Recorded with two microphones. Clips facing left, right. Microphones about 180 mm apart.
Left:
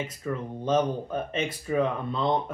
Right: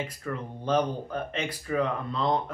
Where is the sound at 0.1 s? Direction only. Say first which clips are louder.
Left 3 dB; 20° left (ahead or behind).